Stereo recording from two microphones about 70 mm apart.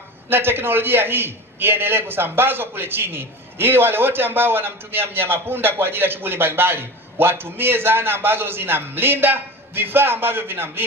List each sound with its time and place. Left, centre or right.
0.3 s a man's voice: right